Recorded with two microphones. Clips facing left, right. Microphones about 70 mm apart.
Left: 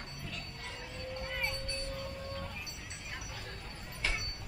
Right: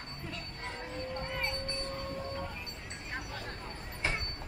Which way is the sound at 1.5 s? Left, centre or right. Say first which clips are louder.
Right 3 dB; right.